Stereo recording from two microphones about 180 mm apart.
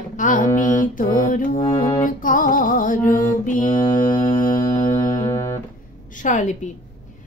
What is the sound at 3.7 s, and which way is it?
Mantra, 25° left (ahead or behind).